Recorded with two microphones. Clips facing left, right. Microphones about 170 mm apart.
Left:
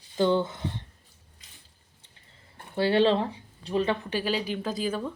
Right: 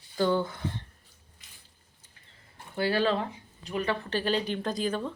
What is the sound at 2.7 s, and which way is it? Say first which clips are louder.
Speech: left 4 dB; 25° left (ahead or behind).